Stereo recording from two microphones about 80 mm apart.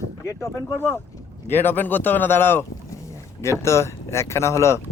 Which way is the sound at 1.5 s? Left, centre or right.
Left.